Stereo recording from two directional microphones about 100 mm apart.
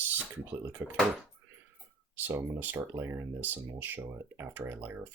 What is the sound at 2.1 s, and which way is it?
Speech, 20° right (ahead or behind).